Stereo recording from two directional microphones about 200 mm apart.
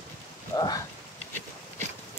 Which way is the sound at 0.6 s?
20° left (ahead or behind).